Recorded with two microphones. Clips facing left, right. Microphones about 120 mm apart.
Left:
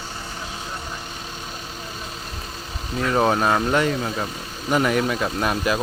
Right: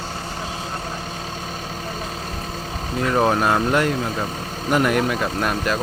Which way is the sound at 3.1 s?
Centre (ahead or behind).